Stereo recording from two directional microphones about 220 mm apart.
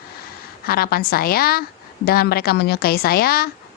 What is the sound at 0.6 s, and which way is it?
A woman's voice, 45° left (ahead or behind).